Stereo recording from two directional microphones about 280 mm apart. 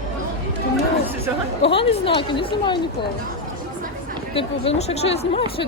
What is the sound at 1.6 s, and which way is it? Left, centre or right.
Speech, centre.